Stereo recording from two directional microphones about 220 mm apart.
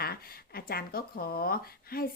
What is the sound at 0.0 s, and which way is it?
Speech, 45° left (ahead or behind).